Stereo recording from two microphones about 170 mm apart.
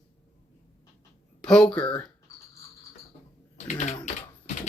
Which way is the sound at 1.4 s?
5° left (ahead or behind).